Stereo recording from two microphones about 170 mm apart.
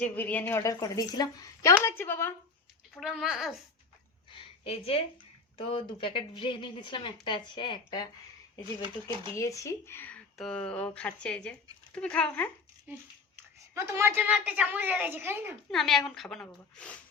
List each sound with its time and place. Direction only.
0.0 s a woman's voice: 10° left (ahead or behind)
2.9 s a woman's voice: 5° right (ahead or behind)
4.3 s a sound: 30° left (ahead or behind)
5.6 s a woman's voice: 30° left (ahead or behind)
9.3 s a woman's voice: 15° left (ahead or behind)
12.9 s a woman's voice: 15° right (ahead or behind)
15.7 s a woman's voice: centre (ahead or behind)